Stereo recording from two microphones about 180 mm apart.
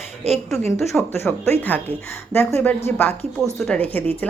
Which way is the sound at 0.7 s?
15° left (ahead or behind).